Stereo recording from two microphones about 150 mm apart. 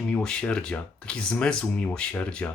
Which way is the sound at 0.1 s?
5° left (ahead or behind).